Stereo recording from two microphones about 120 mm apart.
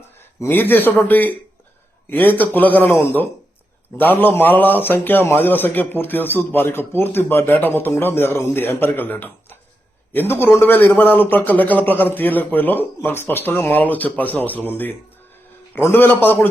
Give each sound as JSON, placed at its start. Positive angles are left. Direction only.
{"t": 0.3, "sound": "a man's voice", "side_deg": 20}